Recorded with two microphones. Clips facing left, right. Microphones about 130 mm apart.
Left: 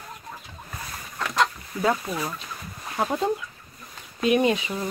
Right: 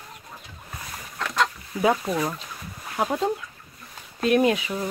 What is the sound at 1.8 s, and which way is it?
Speech, 20° right (ahead or behind).